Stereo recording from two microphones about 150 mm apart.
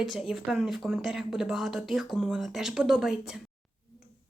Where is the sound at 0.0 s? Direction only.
Centre (ahead or behind).